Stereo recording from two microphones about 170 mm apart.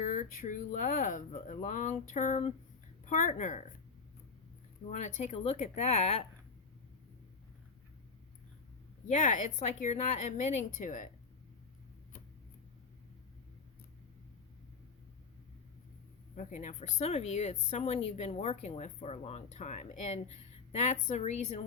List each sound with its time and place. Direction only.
0.0 s speech: 45° left (ahead or behind)
4.9 s speech: 45° left (ahead or behind)
9.0 s speech: 45° left (ahead or behind)
16.3 s speech: 50° left (ahead or behind)